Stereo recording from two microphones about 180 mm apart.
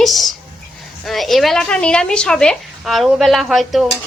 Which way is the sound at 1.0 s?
Centre (ahead or behind).